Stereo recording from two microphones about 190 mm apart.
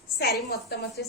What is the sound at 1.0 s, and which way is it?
Speech, 60° left (ahead or behind).